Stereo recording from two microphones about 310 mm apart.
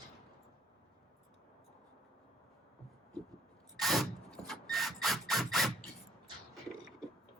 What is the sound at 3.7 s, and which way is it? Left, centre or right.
Squeal, centre.